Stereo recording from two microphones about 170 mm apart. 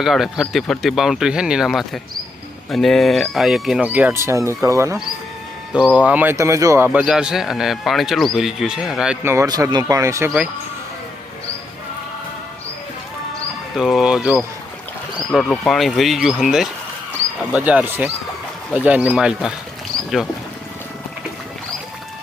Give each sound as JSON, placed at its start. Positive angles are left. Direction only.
{"t": 0.0, "sound": "speech", "side_deg": 0}
{"t": 5.7, "sound": "speech", "side_deg": -5}
{"t": 9.2, "sound": "speech", "side_deg": -15}
{"t": 13.7, "sound": "speech", "side_deg": 0}
{"t": 15.3, "sound": "speech", "side_deg": 5}